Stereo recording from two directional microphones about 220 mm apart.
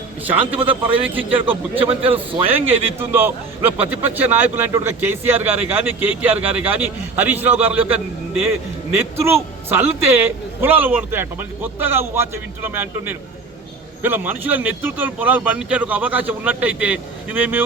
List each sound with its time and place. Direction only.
0.3 s a man's voice: 5° right (ahead or behind)
1.9 s a man's voice: 25° right (ahead or behind)
2.1 s a man's voice: 10° right (ahead or behind)